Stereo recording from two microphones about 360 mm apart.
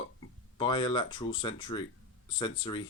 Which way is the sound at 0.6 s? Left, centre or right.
Centre.